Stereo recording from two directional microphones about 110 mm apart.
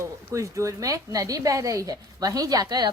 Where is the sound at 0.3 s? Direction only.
30° right (ahead or behind).